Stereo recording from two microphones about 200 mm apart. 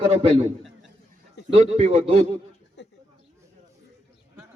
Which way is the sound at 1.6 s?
30° right (ahead or behind).